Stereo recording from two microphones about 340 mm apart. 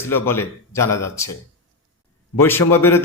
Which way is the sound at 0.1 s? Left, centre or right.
Centre.